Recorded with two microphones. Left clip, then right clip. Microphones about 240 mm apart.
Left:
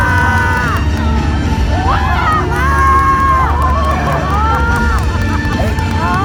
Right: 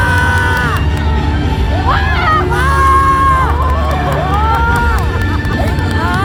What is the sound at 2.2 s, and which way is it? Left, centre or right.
Run, right.